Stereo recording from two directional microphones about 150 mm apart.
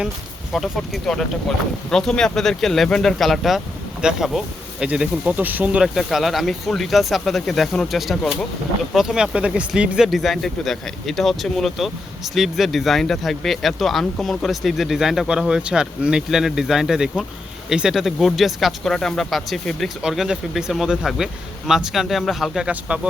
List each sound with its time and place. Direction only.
0.5 s speech: centre (ahead or behind)